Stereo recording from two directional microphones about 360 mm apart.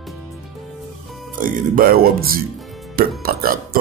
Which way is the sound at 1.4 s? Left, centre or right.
Right.